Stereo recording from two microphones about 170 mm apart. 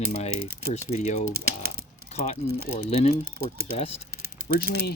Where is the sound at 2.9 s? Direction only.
35° left (ahead or behind).